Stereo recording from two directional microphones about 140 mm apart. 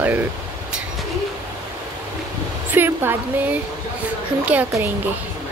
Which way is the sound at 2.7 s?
15° right (ahead or behind).